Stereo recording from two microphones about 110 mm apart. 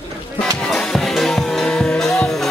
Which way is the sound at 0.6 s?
5° left (ahead or behind).